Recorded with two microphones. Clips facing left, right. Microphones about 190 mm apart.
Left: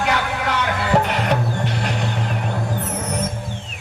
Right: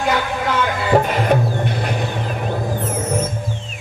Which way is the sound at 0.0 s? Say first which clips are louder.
Right 2 dB; 70° left (ahead or behind).